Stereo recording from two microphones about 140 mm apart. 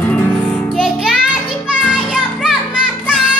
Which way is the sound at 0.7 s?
Centre (ahead or behind).